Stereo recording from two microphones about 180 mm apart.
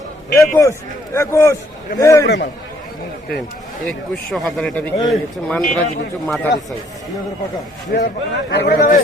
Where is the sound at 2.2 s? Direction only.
70° left (ahead or behind).